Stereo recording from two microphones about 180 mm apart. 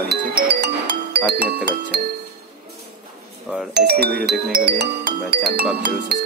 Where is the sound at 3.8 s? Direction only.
60° right (ahead or behind).